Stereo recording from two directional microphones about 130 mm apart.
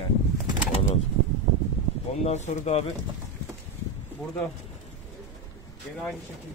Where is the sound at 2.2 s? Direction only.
60° left (ahead or behind).